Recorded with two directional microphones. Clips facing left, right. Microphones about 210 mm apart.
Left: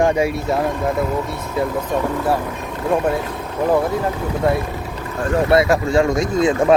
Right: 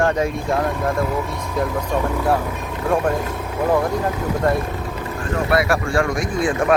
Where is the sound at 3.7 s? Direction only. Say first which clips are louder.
Left 1 dB; 5° left (ahead or behind).